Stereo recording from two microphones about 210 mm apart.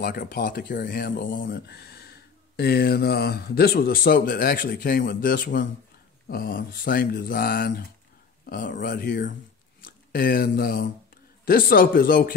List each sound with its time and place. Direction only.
0.0 s speech: 45° left (ahead or behind)